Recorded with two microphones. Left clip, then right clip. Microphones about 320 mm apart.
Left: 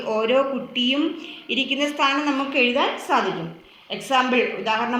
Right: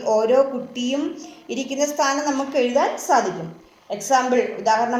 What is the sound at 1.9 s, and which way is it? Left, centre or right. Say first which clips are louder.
A woman's voice: even; right.